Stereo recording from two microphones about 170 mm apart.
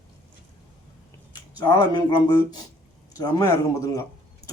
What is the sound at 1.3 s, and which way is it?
A man's voice, 25° left (ahead or behind).